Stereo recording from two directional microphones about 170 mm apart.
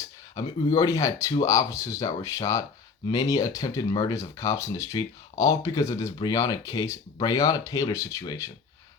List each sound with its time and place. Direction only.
0.3 s speech: 20° left (ahead or behind)